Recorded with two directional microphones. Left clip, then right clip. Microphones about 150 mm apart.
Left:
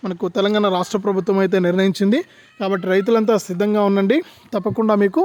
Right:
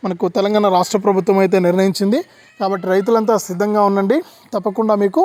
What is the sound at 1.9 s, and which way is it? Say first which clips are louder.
Speech: right 1 dB; 25° left (ahead or behind).